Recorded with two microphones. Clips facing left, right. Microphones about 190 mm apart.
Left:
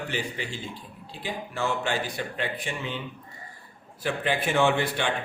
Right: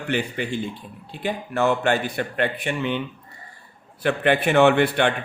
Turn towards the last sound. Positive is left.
turn(degrees=-60)  # may be behind; listen again after turning